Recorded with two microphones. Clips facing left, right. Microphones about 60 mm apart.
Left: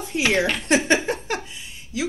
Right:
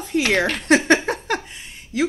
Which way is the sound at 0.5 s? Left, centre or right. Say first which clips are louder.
Right 3 dB; right.